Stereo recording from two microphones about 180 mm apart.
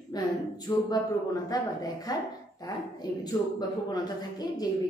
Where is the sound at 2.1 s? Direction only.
20° left (ahead or behind).